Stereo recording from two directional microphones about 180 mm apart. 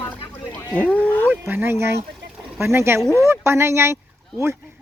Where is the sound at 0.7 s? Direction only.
10° left (ahead or behind).